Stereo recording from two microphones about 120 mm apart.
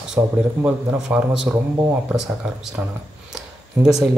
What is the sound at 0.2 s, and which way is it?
A man's voice, 15° right (ahead or behind).